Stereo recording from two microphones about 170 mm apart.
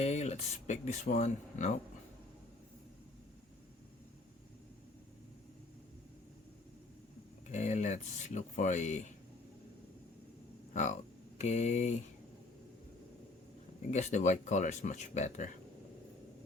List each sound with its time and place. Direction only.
0.0 s speech: 40° left (ahead or behind)
7.5 s speech: 45° left (ahead or behind)
11.3 s speech: 45° left (ahead or behind)
13.9 s speech: 45° left (ahead or behind)